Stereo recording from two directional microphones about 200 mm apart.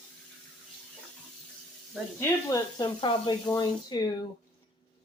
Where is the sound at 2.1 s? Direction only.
15° left (ahead or behind).